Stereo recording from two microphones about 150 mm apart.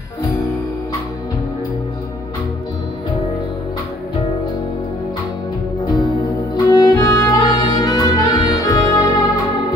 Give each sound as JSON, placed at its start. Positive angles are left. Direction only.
{"t": 5.9, "sound": "music", "side_deg": 25}